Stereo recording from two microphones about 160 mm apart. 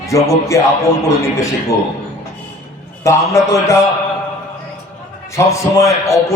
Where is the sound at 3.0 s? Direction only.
20° left (ahead or behind).